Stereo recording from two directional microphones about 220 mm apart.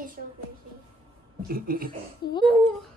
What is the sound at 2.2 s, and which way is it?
Speech, 50° left (ahead or behind).